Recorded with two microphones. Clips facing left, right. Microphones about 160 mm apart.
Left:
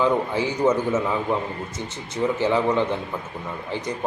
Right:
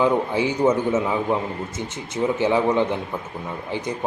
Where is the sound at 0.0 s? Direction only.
15° right (ahead or behind).